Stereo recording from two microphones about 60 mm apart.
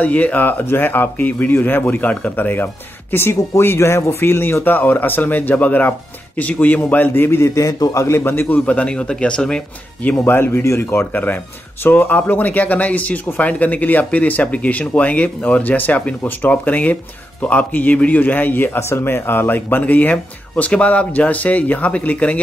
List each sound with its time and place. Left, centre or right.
0.0 s speech: left
7.2 s a man's voice: left
7.5 s a man's voice: left
8.2 s speech: left
8.6 s speech: left
10.2 s a man's voice: left
11.8 s speech: left